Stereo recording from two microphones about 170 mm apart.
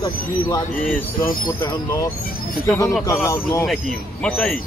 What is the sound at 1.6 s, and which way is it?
Speech, 20° left (ahead or behind).